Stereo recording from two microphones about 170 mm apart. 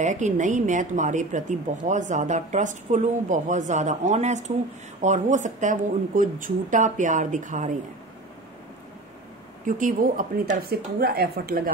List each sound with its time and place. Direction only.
0.0 s speech: 45° right (ahead or behind)
9.7 s speech: 50° right (ahead or behind)
10.6 s speech: 65° right (ahead or behind)